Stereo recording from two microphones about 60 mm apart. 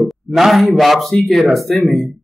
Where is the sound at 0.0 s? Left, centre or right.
Centre.